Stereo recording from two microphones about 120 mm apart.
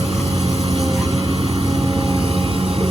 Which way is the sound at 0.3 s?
60° right (ahead or behind).